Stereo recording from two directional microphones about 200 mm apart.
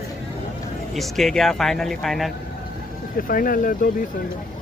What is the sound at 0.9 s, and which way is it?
A man's voice, centre (ahead or behind).